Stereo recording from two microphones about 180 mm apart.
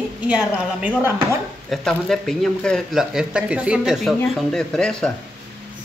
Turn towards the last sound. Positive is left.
turn(degrees=5)  # may be behind; listen again after turning